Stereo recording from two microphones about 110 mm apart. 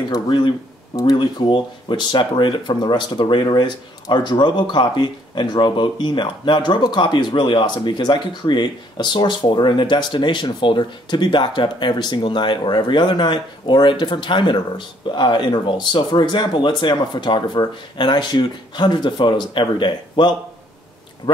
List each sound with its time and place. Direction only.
0.1 s speech: 45° left (ahead or behind)